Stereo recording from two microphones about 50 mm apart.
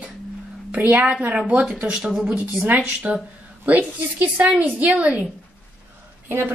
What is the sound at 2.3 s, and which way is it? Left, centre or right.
A woman's voice, right.